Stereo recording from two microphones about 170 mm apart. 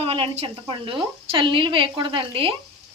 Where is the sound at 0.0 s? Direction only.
35° right (ahead or behind).